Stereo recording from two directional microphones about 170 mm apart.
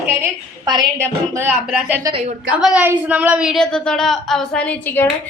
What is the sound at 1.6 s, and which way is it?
A woman's voice, 5° right (ahead or behind).